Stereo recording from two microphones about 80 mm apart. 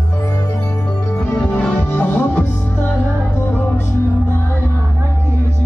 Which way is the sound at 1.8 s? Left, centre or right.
Left.